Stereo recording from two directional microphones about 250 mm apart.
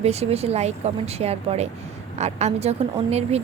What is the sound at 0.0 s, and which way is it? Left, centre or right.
Speech, right.